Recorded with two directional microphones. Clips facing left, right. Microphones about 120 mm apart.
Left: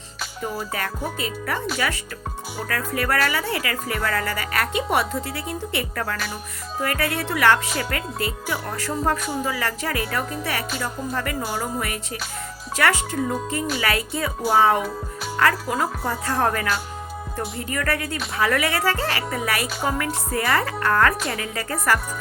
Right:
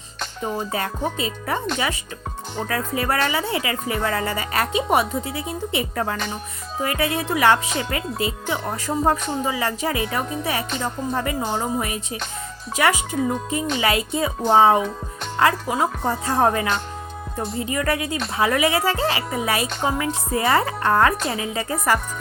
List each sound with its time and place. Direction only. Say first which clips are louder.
0.6 s speech: right 3 dB; 25° right (ahead or behind)